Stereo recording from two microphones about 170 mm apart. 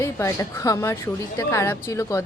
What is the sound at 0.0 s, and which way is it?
A woman's voice, 15° left (ahead or behind).